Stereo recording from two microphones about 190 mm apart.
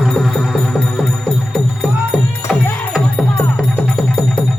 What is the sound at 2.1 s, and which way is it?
Music, 5° right (ahead or behind).